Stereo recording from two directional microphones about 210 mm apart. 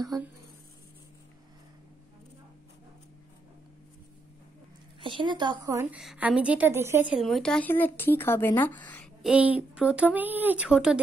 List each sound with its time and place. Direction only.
0.1 s a woman's voice: 15° right (ahead or behind)
5.0 s a woman's voice: 25° right (ahead or behind)
7.2 s speech: centre (ahead or behind)